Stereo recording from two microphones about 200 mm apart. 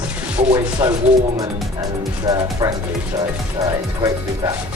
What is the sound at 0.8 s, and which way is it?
Speech, 15° right (ahead or behind).